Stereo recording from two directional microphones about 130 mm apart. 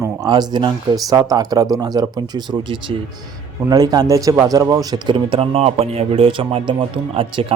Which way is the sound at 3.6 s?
30° right (ahead or behind).